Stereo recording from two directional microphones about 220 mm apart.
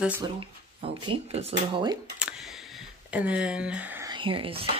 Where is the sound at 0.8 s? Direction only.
25° right (ahead or behind).